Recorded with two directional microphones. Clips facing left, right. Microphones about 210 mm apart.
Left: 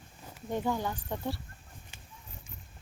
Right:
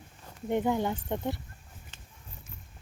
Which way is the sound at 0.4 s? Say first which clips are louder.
Right 4 dB; 20° right (ahead or behind).